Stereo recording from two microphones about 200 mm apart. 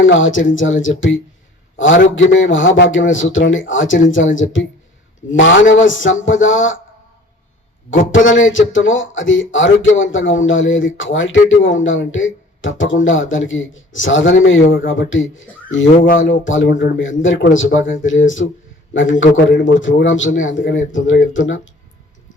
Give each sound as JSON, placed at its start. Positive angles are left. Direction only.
{"t": 0.0, "sound": "speech", "side_deg": 70}
{"t": 7.9, "sound": "a man's voice", "side_deg": 40}
{"t": 8.4, "sound": "speech", "side_deg": 70}
{"t": 15.9, "sound": "a man's voice", "side_deg": 40}
{"t": 16.1, "sound": "speech", "side_deg": 70}